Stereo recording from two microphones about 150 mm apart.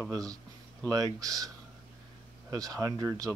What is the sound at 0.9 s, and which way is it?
Speech, 25° right (ahead or behind).